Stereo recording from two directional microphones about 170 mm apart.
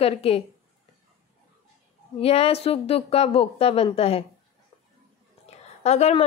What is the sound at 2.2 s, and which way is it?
A woman's voice, 35° left (ahead or behind).